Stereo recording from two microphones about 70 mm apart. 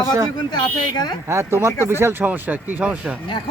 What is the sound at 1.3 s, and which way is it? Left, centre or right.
Speech, right.